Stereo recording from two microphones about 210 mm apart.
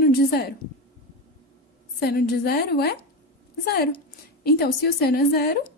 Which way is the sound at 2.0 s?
50° left (ahead or behind).